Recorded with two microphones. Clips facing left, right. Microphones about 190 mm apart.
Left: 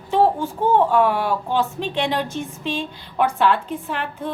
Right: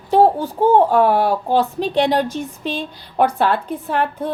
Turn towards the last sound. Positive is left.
turn(degrees=-40)  # may be behind; listen again after turning